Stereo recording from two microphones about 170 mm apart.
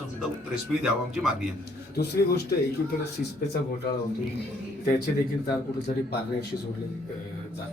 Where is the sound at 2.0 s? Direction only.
75° left (ahead or behind).